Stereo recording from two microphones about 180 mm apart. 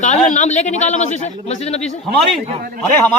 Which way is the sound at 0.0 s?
40° left (ahead or behind).